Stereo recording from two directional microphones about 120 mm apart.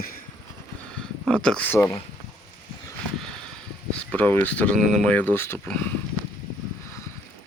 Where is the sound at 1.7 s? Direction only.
20° left (ahead or behind).